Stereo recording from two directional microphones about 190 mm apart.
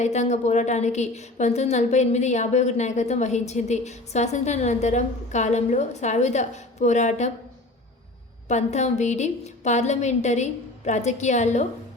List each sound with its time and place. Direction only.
0.0 s a woman's voice: 35° left (ahead or behind)
8.4 s a woman's voice: 35° left (ahead or behind)